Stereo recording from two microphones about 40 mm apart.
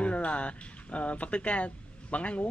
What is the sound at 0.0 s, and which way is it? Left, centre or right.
Speech, left.